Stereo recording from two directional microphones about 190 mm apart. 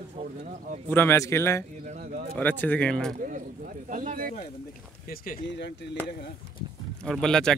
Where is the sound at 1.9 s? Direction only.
40° right (ahead or behind).